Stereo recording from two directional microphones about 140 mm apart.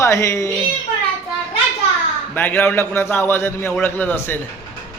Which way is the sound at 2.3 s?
15° left (ahead or behind).